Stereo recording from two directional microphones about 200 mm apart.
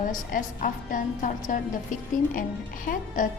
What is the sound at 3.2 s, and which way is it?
Speech, 40° left (ahead or behind).